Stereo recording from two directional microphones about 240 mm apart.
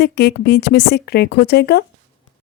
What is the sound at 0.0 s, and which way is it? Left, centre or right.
Speech, left.